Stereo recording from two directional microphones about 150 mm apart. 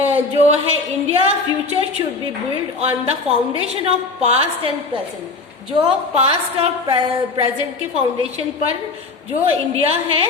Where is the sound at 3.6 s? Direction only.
40° right (ahead or behind).